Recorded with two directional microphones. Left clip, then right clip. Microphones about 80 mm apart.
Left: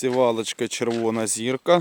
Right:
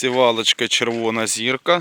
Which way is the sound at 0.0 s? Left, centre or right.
Centre.